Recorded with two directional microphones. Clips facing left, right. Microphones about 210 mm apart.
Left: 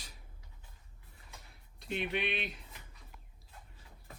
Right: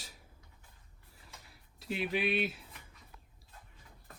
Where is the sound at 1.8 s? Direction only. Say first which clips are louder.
Right 2 dB; 5° right (ahead or behind).